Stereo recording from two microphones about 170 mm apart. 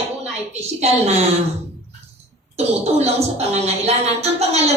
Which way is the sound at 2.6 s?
40° right (ahead or behind).